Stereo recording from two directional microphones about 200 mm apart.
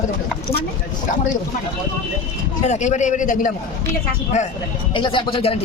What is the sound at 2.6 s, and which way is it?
Speech, 35° left (ahead or behind).